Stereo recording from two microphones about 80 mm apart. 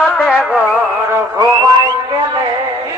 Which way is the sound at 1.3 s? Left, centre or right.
Right.